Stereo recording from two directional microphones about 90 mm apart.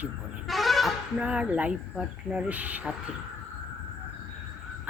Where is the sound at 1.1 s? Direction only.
15° right (ahead or behind).